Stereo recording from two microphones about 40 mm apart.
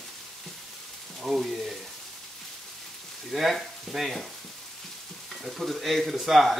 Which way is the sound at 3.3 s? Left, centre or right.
Centre.